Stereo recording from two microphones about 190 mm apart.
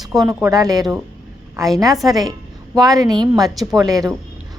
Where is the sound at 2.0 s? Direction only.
20° right (ahead or behind).